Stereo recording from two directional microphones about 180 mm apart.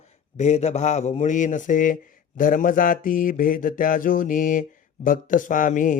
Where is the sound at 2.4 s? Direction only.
50° left (ahead or behind).